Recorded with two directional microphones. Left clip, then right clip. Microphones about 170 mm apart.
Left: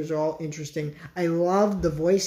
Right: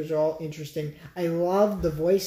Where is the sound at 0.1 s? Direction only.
Centre (ahead or behind).